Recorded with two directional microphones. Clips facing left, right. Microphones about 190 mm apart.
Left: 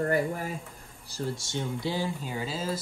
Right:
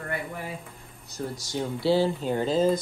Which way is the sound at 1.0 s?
30° left (ahead or behind).